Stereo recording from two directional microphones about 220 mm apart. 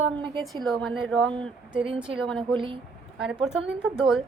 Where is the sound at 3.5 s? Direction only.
Centre (ahead or behind).